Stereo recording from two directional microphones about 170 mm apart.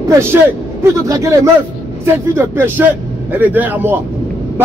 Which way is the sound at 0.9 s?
20° right (ahead or behind).